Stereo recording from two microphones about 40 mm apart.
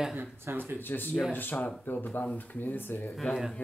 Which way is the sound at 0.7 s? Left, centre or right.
Left.